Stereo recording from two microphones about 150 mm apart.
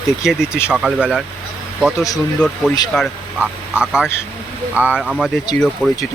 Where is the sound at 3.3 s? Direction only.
5° right (ahead or behind).